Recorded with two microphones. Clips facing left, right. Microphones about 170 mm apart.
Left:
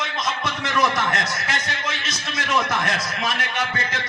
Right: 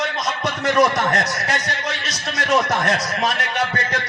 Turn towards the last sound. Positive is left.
turn(degrees=-40)  # may be behind; listen again after turning